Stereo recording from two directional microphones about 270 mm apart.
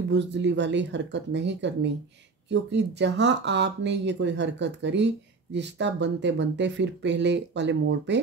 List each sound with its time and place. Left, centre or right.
0.1 s speech: right